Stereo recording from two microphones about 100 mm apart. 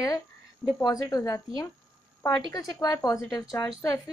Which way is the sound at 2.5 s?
40° left (ahead or behind).